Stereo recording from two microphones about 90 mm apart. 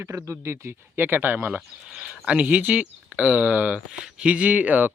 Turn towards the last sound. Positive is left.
turn(degrees=-20)  # may be behind; listen again after turning